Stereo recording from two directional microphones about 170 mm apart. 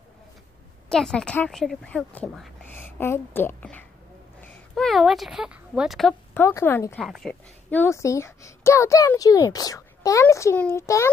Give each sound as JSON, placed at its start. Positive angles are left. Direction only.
{"t": 0.8, "sound": "a woman's voice", "side_deg": 5}
{"t": 6.3, "sound": "speech", "side_deg": 15}